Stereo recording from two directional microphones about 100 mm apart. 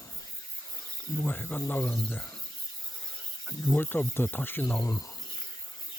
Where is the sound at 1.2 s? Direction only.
15° left (ahead or behind).